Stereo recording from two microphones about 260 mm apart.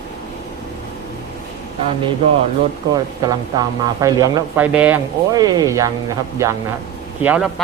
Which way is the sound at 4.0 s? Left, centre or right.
Centre.